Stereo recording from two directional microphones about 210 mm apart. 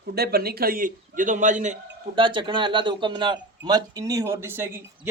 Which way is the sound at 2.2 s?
25° right (ahead or behind).